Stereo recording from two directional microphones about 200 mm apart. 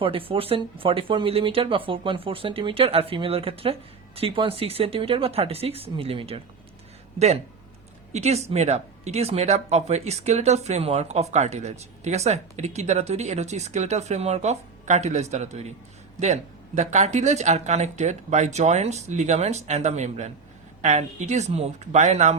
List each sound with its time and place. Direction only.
0.0 s speech: 25° right (ahead or behind)
8.1 s speech: 35° right (ahead or behind)